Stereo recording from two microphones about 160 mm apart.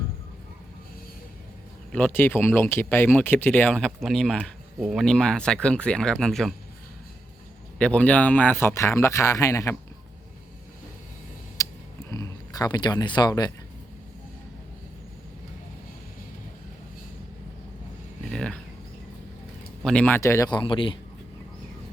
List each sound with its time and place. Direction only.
1.9 s speech: 10° left (ahead or behind)
7.8 s speech: 5° left (ahead or behind)
11.6 s a sound: 20° left (ahead or behind)
12.1 s speech: 25° left (ahead or behind)
18.3 s a sound: 5° left (ahead or behind)
19.8 s speech: 5° left (ahead or behind); by 20.9 s 30° left (ahead or behind)